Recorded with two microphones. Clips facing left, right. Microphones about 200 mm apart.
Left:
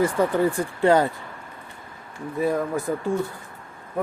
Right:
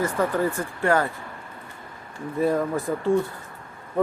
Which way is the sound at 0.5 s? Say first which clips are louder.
Left 4 dB; 20° left (ahead or behind).